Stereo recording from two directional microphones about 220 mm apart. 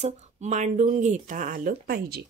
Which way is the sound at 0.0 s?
30° right (ahead or behind).